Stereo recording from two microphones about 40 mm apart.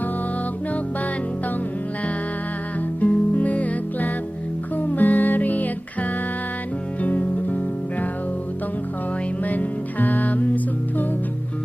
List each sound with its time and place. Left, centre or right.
3.0 s music: left
9.4 s music: left